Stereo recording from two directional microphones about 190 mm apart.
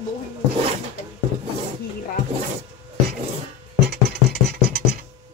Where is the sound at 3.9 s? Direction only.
60° right (ahead or behind).